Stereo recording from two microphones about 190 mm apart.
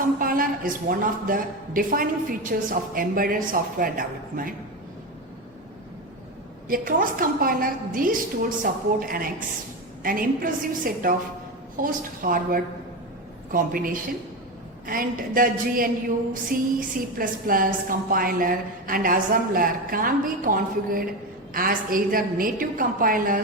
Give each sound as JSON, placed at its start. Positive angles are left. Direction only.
{"t": 0.2, "sound": "a man's voice", "side_deg": -50}
{"t": 6.7, "sound": "a man's voice", "side_deg": -45}